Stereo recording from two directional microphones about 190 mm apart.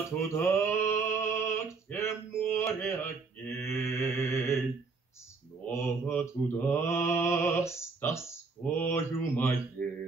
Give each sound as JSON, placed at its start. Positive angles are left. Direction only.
{"t": 0.2, "sound": "male singing", "side_deg": 15}
{"t": 2.9, "sound": "mantra", "side_deg": 10}
{"t": 5.7, "sound": "mantra", "side_deg": 15}